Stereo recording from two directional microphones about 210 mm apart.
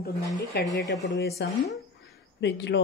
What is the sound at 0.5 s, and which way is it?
Speech, 50° left (ahead or behind).